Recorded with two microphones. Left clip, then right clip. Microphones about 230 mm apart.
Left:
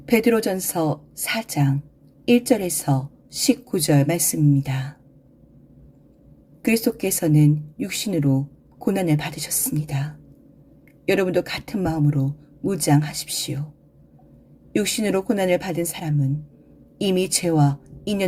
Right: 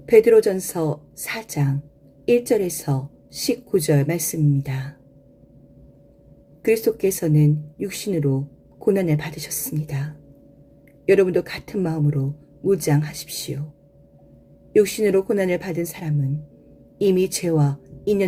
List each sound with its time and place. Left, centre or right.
0.0 s a woman's voice: left
6.7 s a woman's voice: left
14.7 s a woman's voice: left